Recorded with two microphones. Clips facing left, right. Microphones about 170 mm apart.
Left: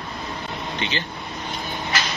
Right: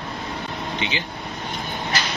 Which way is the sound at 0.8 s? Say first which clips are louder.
Left 1 dB; 15° right (ahead or behind).